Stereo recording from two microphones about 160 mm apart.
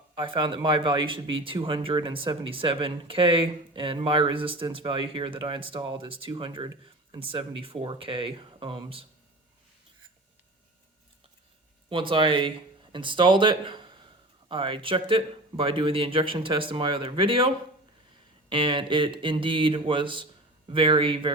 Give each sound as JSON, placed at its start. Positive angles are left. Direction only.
{"t": 0.2, "sound": "speech", "side_deg": -30}
{"t": 11.9, "sound": "speech", "side_deg": -30}